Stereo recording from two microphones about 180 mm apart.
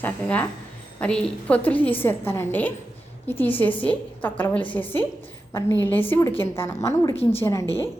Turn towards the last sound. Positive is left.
turn(degrees=15)  # may be behind; listen again after turning